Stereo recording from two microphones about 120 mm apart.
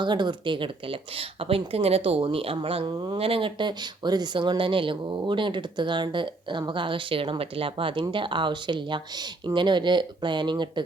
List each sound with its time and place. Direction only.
0.0 s speech: 40° right (ahead or behind)